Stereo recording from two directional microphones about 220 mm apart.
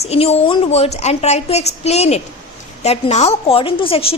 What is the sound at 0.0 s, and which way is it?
A woman's voice, 30° left (ahead or behind).